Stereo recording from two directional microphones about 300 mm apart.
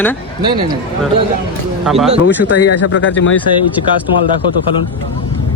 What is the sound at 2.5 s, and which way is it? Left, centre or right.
Speech, left.